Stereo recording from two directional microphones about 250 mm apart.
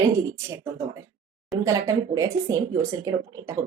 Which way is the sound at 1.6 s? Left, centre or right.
Centre.